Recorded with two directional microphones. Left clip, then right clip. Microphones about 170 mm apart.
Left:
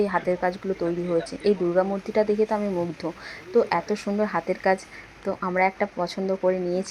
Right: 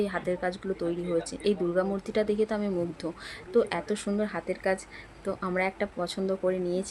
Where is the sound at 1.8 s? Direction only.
5° left (ahead or behind).